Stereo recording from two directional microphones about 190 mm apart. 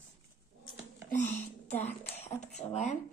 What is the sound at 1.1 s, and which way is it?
Speech, 40° left (ahead or behind).